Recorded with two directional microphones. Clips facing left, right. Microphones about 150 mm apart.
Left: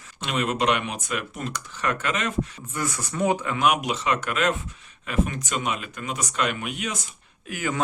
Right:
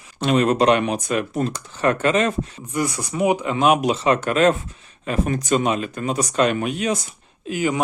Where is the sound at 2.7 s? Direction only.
15° right (ahead or behind).